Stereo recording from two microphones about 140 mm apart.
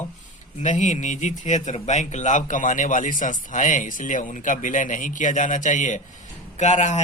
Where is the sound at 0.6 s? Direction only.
60° left (ahead or behind).